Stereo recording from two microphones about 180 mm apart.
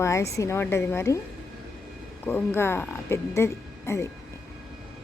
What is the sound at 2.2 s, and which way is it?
A woman's voice, 10° left (ahead or behind).